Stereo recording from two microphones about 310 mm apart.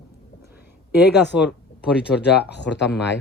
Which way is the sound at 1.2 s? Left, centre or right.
Left.